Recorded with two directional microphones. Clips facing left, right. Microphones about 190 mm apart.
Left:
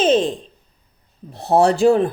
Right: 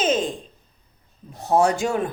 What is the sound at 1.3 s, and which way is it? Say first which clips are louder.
Speech: left 4 dB; 35° left (ahead or behind).